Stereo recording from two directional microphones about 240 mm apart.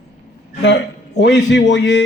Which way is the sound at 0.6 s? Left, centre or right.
Left.